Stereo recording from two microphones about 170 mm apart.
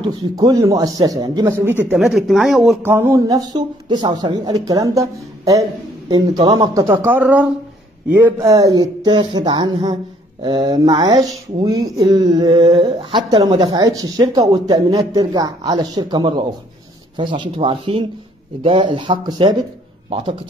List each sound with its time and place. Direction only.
0.0 s speech: 20° right (ahead or behind)
2.0 s speech: centre (ahead or behind)
2.8 s speech: 15° right (ahead or behind); by 6.7 s 30° right (ahead or behind)
6.7 s speech: 15° right (ahead or behind)
8.5 s speech: 20° right (ahead or behind)